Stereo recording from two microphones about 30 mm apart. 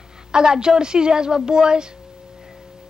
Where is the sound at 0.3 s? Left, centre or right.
Right.